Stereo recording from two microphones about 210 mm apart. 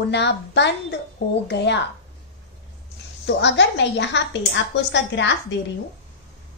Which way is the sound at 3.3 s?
55° left (ahead or behind).